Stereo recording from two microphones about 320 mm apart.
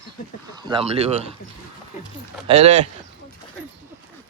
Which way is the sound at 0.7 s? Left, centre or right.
Centre.